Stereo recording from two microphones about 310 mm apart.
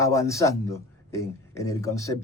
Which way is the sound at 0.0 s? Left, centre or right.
Centre.